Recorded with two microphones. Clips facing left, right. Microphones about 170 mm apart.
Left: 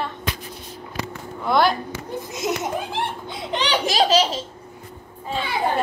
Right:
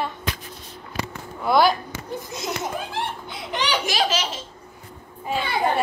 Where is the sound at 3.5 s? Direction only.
35° left (ahead or behind).